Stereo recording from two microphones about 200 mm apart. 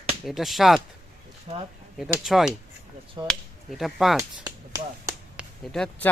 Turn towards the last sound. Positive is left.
turn(degrees=5)  # may be behind; listen again after turning